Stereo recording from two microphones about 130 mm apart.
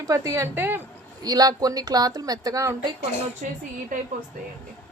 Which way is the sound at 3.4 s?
90° right.